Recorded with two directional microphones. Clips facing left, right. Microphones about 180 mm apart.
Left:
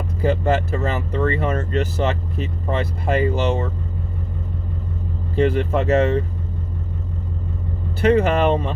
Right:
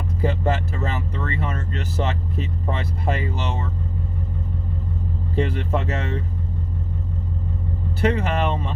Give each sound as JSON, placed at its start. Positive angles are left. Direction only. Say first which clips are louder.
{"t": 0.3, "sound": "speech", "louder": "left 5 dB", "side_deg": 55}
{"t": 5.5, "sound": "speech", "louder": "left 7 dB", "side_deg": 55}
{"t": 8.0, "sound": "speech", "louder": "left 6 dB", "side_deg": 55}